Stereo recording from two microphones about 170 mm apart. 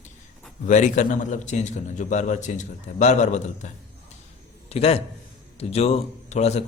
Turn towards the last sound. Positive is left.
turn(degrees=40)  # may be behind; listen again after turning